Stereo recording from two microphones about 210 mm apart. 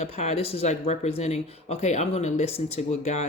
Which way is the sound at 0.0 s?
30° left (ahead or behind).